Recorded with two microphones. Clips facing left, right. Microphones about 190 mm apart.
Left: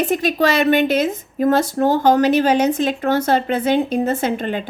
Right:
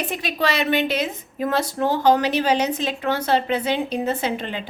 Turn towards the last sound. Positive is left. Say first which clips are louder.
# left 5 dB
turn(degrees=50)  # may be behind; listen again after turning